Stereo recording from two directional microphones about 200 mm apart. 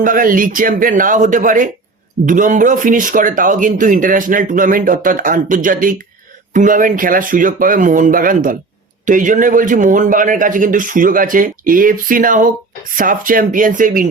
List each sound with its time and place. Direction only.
0.0 s a man's voice: 45° right (ahead or behind)